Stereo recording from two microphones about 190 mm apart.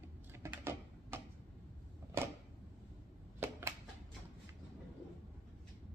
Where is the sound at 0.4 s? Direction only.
10° right (ahead or behind).